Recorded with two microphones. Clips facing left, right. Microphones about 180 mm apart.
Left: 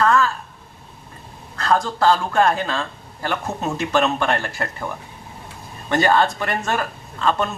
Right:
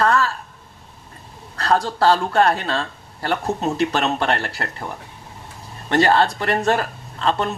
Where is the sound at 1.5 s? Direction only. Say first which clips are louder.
Even; 35° right (ahead or behind).